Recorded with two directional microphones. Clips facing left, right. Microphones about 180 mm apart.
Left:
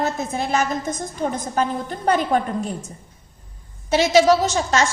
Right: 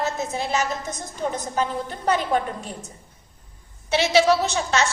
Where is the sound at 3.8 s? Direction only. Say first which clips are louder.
Left 3 dB; 45° left (ahead or behind).